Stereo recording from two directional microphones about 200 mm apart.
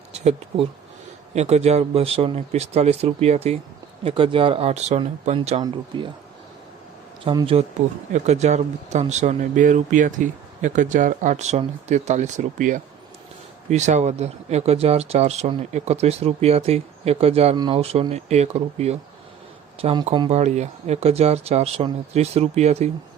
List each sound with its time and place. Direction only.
0.1 s speech: 30° right (ahead or behind)
7.3 s speech: 25° right (ahead or behind)